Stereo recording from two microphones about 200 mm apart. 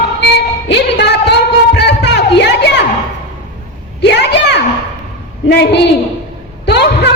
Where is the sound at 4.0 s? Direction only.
60° left (ahead or behind).